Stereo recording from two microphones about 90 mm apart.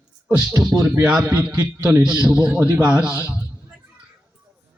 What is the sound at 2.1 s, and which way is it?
A man's voice, 15° right (ahead or behind).